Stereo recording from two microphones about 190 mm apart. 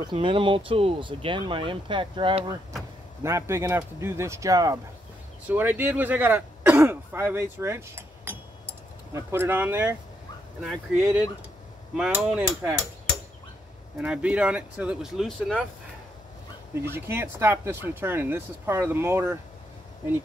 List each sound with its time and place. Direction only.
0.0 s speech: 25° right (ahead or behind)
3.2 s speech: 15° right (ahead or behind)
11.9 s hammer: 5° right (ahead or behind)
13.9 s speech: 5° right (ahead or behind)
16.7 s speech: 10° right (ahead or behind)